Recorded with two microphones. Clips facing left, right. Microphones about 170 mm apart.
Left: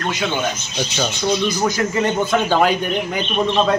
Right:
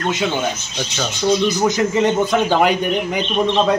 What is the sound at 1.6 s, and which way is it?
A man's voice, 20° right (ahead or behind).